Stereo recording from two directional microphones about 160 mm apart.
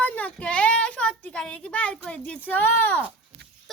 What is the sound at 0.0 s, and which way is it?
A woman's voice, 10° left (ahead or behind).